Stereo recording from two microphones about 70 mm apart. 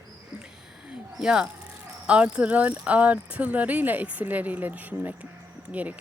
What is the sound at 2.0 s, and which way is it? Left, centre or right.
Speech, centre.